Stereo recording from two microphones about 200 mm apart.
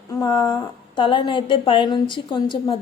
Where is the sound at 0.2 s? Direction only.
20° left (ahead or behind).